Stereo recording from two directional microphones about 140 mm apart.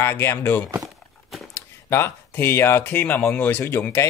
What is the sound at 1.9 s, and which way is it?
Speech, 15° left (ahead or behind).